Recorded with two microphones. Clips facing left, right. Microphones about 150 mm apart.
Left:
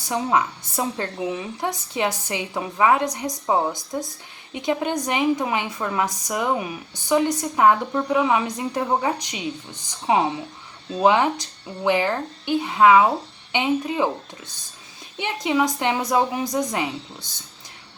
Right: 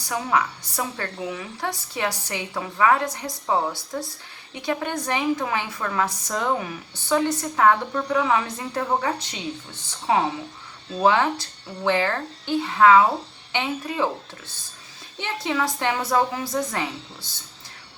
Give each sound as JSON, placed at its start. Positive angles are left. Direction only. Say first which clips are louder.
{"t": 0.0, "sound": "a woman's voice", "louder": "left 2 dB", "side_deg": 20}
{"t": 15.2, "sound": "a woman's voice", "louder": "left 4 dB", "side_deg": 15}